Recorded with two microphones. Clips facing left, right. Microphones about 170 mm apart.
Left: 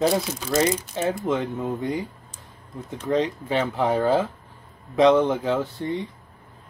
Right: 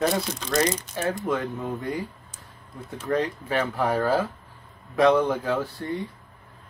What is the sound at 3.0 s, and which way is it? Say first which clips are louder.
Speech: left 2 dB; 20° left (ahead or behind).